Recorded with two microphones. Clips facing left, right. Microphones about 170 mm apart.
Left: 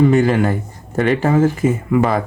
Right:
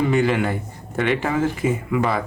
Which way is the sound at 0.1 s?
40° left (ahead or behind).